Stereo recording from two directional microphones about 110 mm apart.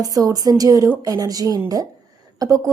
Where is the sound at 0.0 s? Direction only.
35° right (ahead or behind).